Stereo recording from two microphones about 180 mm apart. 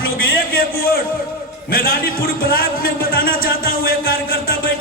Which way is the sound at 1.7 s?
55° left (ahead or behind).